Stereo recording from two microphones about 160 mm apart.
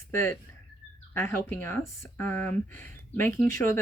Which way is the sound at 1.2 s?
15° left (ahead or behind).